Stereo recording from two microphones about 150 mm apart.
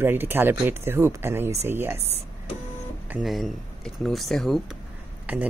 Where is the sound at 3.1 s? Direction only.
Centre (ahead or behind).